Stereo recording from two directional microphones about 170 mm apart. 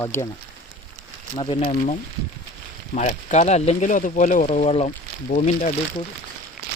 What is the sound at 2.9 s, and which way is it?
Speech, 45° left (ahead or behind).